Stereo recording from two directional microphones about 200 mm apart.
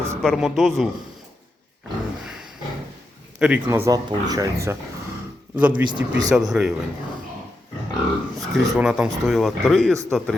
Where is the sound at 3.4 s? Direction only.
10° right (ahead or behind).